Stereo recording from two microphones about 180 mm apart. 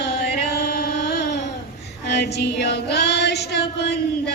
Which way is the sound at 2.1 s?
70° left (ahead or behind).